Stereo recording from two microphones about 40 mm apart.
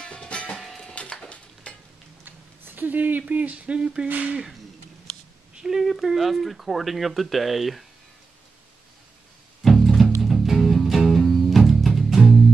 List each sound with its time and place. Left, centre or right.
0.0 s music: left
1.3 s stir: left
2.2 s speech: right
4.1 s speech: right
5.6 s speech: centre
9.6 s music: centre
11.5 s music: centre